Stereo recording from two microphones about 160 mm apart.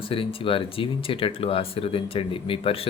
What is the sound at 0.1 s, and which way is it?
Speech, 35° left (ahead or behind).